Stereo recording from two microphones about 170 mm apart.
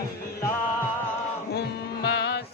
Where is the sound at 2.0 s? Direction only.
80° left.